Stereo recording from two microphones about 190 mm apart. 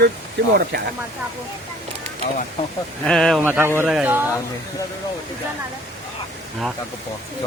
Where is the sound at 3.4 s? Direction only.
10° right (ahead or behind).